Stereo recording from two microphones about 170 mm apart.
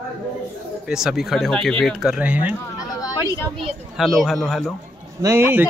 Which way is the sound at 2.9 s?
20° left (ahead or behind).